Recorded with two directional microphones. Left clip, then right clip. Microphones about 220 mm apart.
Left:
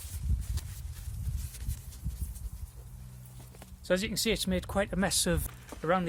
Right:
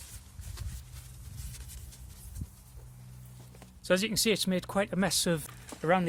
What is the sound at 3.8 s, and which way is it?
Speech, 25° right (ahead or behind).